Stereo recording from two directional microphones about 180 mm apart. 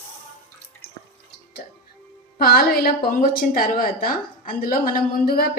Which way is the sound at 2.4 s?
55° left (ahead or behind).